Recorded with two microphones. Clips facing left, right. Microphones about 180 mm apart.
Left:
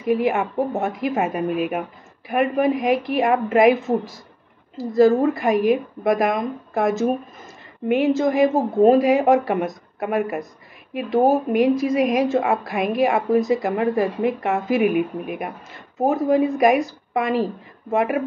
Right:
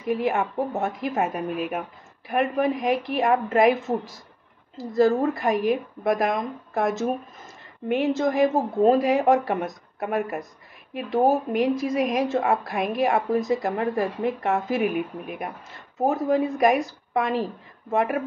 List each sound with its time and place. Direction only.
0.0 s a woman's voice: 10° left (ahead or behind)